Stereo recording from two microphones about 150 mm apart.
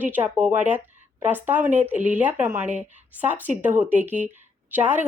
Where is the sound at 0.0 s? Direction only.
10° right (ahead or behind).